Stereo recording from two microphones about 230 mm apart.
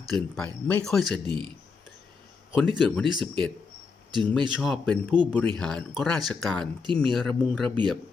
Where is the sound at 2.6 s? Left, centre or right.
Centre.